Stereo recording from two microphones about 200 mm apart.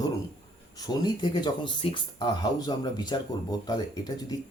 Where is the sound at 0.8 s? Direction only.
20° left (ahead or behind).